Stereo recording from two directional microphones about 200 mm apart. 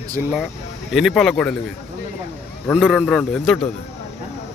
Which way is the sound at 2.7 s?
Centre (ahead or behind).